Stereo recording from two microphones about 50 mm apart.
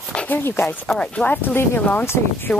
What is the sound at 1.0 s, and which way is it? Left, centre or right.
Speech, left.